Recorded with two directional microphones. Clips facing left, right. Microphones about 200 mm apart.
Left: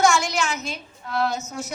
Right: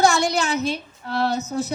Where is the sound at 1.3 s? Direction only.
60° right (ahead or behind).